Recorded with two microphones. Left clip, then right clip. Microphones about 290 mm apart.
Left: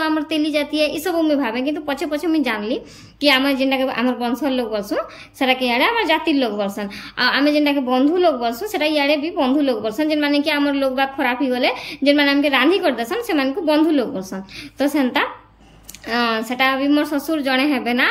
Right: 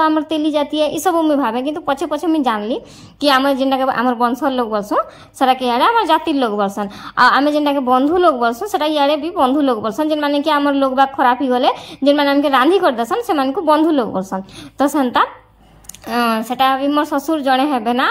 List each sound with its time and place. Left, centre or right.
0.0 s a woman's voice: centre